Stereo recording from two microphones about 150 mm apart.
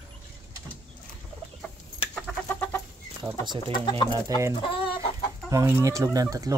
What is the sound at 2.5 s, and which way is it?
Chicken, 15° left (ahead or behind).